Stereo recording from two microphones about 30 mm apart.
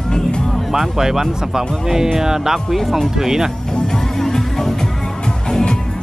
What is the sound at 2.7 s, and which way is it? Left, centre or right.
Speech, centre.